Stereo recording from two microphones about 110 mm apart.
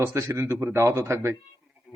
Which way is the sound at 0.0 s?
25° right (ahead or behind).